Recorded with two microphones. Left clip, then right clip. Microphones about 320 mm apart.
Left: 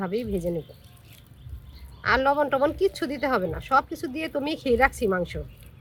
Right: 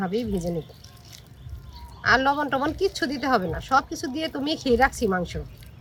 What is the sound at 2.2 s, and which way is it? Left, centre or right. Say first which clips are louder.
Speech: left 1 dB; centre.